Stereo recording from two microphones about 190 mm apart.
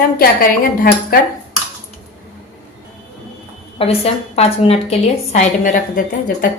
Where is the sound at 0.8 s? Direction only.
50° left (ahead or behind).